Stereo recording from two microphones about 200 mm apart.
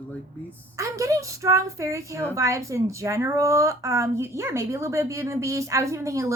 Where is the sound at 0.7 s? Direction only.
15° right (ahead or behind).